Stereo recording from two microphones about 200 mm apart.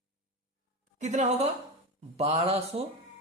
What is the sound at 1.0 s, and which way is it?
Speech, 35° right (ahead or behind).